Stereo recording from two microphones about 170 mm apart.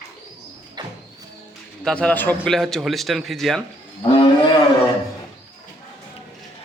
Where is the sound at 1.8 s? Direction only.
5° left (ahead or behind).